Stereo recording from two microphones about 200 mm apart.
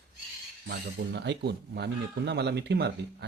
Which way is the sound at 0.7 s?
60° right (ahead or behind).